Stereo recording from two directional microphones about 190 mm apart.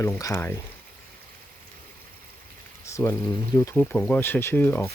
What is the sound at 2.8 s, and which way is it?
Speech, 15° left (ahead or behind).